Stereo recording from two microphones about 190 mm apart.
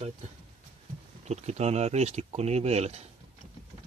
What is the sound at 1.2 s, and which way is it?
Speech, 35° right (ahead or behind).